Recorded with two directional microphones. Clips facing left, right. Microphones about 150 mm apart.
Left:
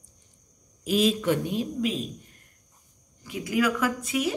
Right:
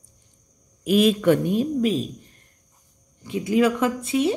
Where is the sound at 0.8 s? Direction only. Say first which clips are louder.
Right 6 dB; 60° right (ahead or behind); by 2.0 s 40° right (ahead or behind).